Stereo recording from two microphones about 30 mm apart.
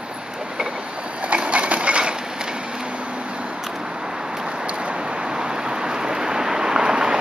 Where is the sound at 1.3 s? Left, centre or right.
Right.